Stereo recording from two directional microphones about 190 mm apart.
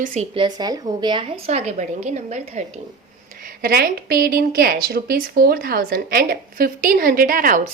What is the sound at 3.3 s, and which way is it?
A woman's voice, 50° right (ahead or behind).